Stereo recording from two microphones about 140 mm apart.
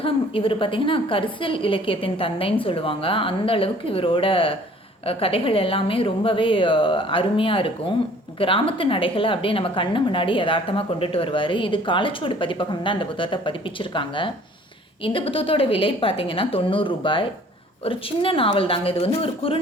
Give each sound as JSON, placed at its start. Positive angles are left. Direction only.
{"t": 0.0, "sound": "a woman's voice", "side_deg": 40}